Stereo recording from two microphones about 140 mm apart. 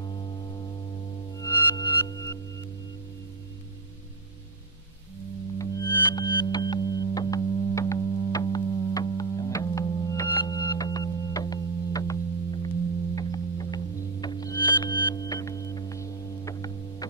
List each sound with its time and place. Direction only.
0.0 s music: 30° left (ahead or behind)
5.6 s music: 25° left (ahead or behind)